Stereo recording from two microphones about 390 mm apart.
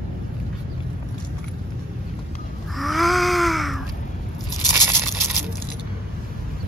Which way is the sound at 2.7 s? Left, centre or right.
Centre.